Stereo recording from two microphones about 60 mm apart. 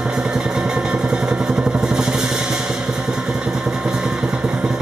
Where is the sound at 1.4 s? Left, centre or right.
Centre.